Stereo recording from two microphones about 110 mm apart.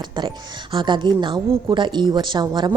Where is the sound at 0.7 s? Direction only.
45° right (ahead or behind).